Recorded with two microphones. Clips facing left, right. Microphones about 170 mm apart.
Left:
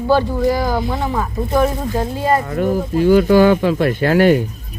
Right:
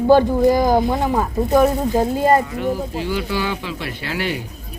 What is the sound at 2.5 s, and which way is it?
Speech, 45° left (ahead or behind).